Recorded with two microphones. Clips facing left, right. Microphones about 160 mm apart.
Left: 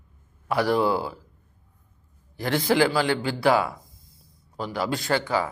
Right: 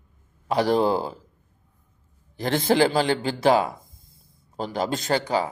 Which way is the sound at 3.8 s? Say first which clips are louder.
Even; 50° right (ahead or behind).